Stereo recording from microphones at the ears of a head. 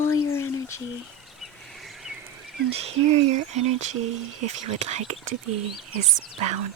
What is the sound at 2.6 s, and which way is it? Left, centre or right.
Speech, right.